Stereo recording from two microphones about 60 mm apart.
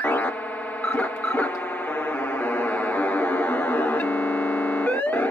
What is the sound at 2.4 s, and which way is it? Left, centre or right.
Music, left.